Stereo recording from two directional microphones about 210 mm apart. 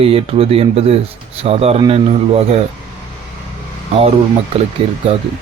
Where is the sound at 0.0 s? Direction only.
25° right (ahead or behind).